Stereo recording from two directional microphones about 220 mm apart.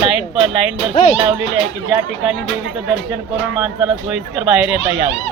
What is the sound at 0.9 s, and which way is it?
Speech, 30° left (ahead or behind).